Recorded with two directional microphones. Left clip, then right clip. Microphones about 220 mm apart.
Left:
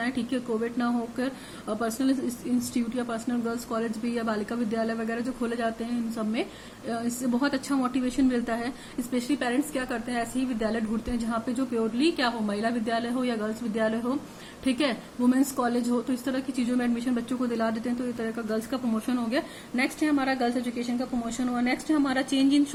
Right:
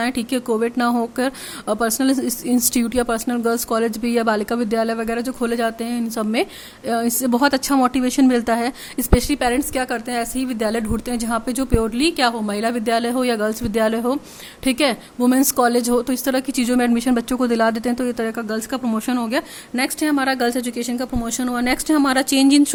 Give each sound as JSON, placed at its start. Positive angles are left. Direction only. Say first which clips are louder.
{"t": 0.0, "sound": "a woman's voice", "louder": "right 8 dB", "side_deg": -50}